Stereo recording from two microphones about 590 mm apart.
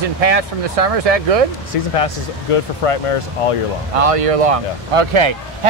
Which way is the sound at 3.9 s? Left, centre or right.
Right.